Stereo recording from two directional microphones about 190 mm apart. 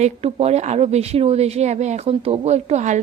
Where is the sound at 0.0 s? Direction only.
35° right (ahead or behind).